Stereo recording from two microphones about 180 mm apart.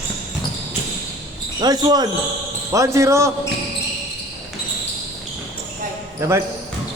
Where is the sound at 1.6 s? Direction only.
20° right (ahead or behind).